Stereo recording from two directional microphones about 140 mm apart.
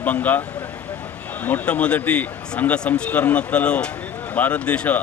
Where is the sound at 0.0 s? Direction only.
10° left (ahead or behind).